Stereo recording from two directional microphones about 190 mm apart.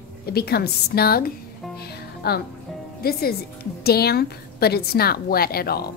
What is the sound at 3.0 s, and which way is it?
A woman's voice, 55° left (ahead or behind).